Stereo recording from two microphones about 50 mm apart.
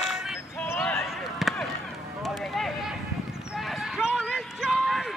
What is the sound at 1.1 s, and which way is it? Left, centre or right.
Basketball bounce, centre.